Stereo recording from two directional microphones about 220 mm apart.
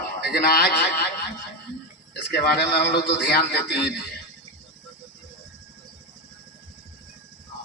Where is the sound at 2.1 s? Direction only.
50° left (ahead or behind).